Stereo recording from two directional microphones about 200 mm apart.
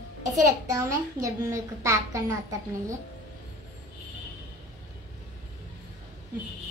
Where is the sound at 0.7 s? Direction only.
15° right (ahead or behind).